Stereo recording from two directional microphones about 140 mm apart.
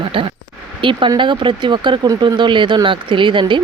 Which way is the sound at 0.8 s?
35° right (ahead or behind).